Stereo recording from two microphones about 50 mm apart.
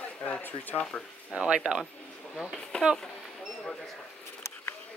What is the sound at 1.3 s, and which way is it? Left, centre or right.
Speech, centre.